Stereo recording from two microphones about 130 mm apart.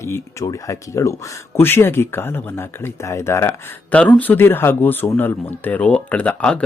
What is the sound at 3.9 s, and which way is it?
Speech, 10° left (ahead or behind).